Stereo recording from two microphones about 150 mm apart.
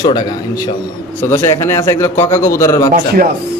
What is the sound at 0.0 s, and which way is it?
A man's voice, 25° left (ahead or behind).